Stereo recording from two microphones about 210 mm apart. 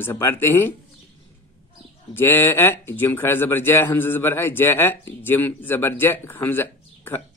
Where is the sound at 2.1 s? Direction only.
10° left (ahead or behind).